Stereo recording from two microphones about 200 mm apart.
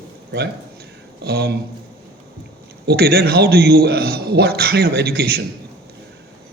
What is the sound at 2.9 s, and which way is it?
Speech, 50° right (ahead or behind).